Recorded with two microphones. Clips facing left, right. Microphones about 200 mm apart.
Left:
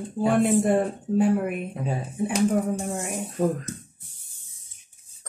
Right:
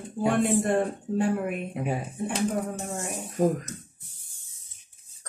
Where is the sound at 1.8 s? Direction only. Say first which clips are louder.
Even; 15° right (ahead or behind).